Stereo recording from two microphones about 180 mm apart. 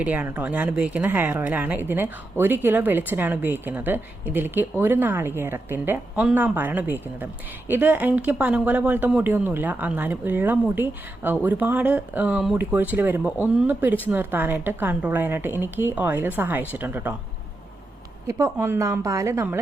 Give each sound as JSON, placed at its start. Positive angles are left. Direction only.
{"t": 0.0, "sound": "speech", "side_deg": -10}
{"t": 18.3, "sound": "speech", "side_deg": -15}